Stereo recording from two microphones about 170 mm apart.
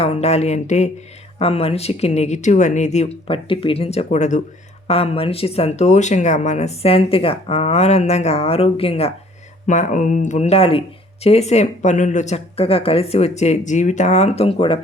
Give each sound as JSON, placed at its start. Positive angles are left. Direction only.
{"t": 0.0, "sound": "speech", "side_deg": 40}
{"t": 4.9, "sound": "speech", "side_deg": 35}
{"t": 9.6, "sound": "speech", "side_deg": 45}